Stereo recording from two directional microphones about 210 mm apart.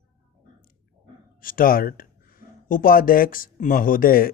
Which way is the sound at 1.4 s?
40° left (ahead or behind).